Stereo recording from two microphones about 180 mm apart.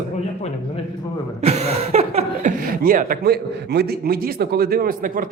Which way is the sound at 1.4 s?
35° right (ahead or behind).